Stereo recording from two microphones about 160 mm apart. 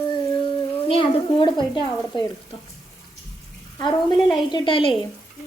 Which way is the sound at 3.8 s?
25° left (ahead or behind).